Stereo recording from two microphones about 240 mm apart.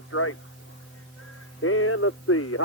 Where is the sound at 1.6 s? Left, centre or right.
Left.